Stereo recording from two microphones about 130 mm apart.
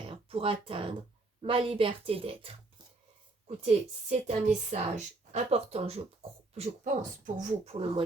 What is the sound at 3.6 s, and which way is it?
A woman's voice, 55° right (ahead or behind).